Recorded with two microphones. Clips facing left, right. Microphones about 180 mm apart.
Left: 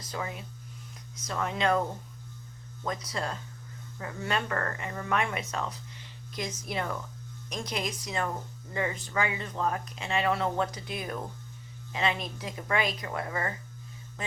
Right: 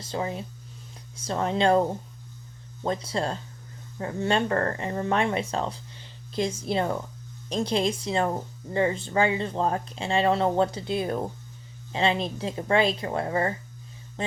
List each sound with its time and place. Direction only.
0.0 s speech: 30° right (ahead or behind)
2.8 s speech: 30° right (ahead or behind)
14.2 s a sound: 30° right (ahead or behind)